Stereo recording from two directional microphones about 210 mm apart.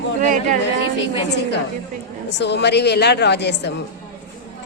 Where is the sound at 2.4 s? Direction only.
55° left (ahead or behind).